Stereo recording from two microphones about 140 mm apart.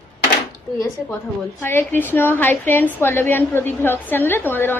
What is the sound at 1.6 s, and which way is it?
A woman's voice, 15° left (ahead or behind).